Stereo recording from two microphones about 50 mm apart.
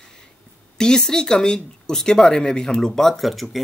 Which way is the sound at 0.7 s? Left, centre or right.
Centre.